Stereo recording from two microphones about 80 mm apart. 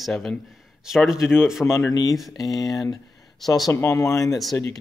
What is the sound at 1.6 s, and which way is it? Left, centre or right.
Speech, left.